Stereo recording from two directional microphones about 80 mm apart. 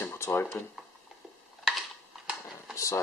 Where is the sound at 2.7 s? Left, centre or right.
Left.